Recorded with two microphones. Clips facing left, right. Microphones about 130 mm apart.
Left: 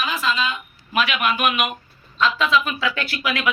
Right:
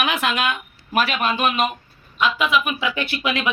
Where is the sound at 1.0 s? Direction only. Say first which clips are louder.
Even; 35° right (ahead or behind).